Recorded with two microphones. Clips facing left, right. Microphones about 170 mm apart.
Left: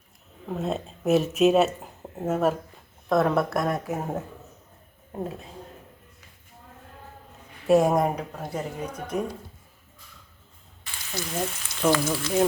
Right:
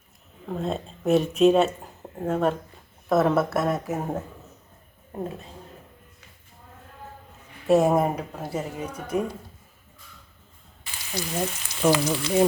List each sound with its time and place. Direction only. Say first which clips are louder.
0.4 s speech: even; centre (ahead or behind)
7.7 s speech: even; centre (ahead or behind)
11.3 s speech: right 1 dB; 5° right (ahead or behind)